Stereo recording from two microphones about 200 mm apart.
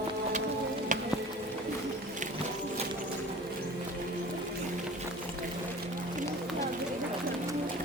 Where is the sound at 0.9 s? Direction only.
40° right (ahead or behind).